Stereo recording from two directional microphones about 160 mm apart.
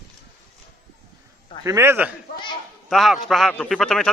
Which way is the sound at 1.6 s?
15° right (ahead or behind).